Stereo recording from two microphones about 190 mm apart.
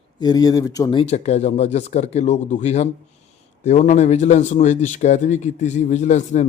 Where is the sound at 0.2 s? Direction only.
20° left (ahead or behind).